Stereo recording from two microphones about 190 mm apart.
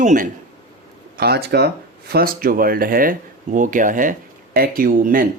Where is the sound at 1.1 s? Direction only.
55° right (ahead or behind).